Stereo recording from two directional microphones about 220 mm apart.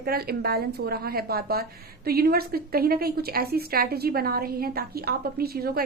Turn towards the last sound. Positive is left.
turn(degrees=-45)  # may be behind; listen again after turning